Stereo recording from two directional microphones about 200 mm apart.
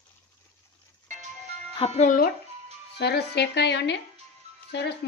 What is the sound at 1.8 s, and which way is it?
Speech, 35° left (ahead or behind).